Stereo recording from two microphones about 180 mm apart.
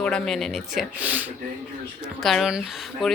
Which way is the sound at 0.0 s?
5° left (ahead or behind).